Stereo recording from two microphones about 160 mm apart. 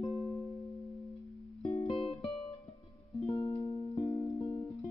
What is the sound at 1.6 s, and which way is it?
Music, 40° left (ahead or behind).